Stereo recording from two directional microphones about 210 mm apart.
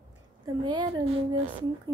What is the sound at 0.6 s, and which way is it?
A woman's voice, 20° right (ahead or behind).